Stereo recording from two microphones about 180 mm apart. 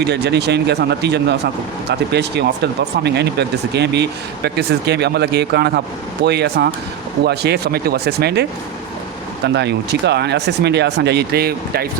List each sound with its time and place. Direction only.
0.0 s speech: 70° right (ahead or behind)